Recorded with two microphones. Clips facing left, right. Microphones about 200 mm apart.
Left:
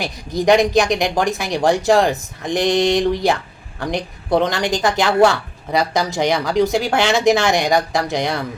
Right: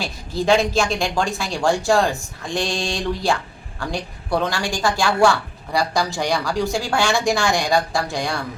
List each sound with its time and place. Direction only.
0.0 s speech: 20° left (ahead or behind)